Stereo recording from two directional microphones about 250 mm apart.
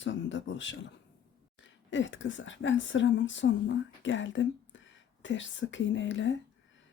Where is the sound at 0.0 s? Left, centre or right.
Left.